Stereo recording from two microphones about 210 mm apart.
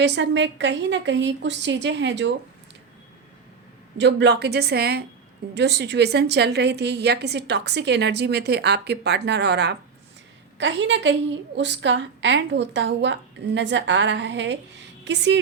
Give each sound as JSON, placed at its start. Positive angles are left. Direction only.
{"t": 0.0, "sound": "a woman's voice", "side_deg": -55}
{"t": 3.9, "sound": "a woman's voice", "side_deg": -55}